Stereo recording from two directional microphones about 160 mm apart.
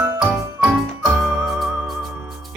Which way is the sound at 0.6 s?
5° right (ahead or behind).